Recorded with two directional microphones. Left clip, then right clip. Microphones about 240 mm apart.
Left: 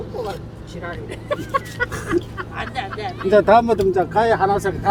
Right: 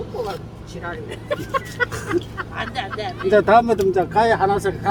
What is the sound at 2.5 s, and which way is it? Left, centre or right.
Speech, right.